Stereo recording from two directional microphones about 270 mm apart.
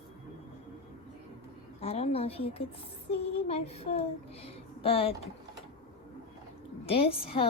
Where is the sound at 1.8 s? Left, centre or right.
Left.